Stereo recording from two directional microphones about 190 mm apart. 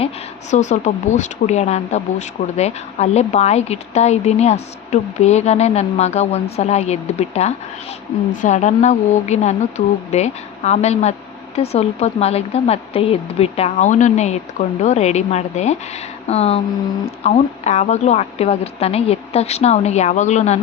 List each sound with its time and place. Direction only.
0.5 s speech: 40° left (ahead or behind)